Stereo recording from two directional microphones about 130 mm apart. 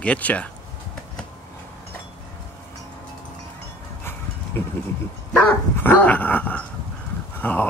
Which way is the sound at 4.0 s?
20° left (ahead or behind).